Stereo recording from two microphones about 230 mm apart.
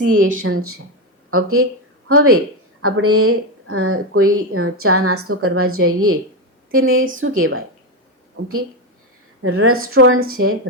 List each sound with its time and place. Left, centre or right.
0.4 s a woman's voice: right
9.4 s speech: right